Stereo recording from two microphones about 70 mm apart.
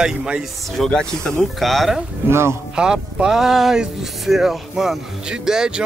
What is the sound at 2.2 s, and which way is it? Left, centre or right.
Speech, right.